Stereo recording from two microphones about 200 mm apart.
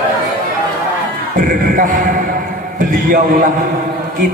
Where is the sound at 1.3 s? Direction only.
40° right (ahead or behind).